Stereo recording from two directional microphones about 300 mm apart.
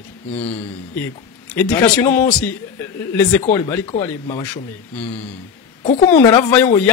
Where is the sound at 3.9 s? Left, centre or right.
Centre.